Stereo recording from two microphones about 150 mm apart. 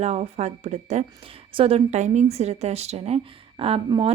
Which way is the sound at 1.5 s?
40° right (ahead or behind).